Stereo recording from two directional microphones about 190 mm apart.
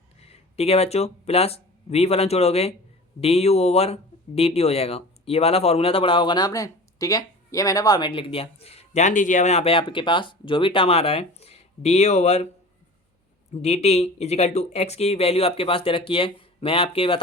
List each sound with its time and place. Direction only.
0.2 s speech: 30° left (ahead or behind)
13.5 s speech: 35° left (ahead or behind)